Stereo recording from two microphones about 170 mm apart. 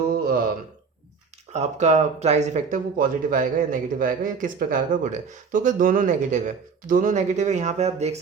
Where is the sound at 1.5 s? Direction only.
40° right (ahead or behind).